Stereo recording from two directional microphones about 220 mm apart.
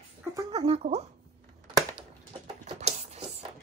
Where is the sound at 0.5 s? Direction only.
25° right (ahead or behind).